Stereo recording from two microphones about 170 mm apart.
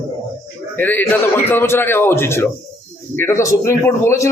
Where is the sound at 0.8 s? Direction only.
10° left (ahead or behind).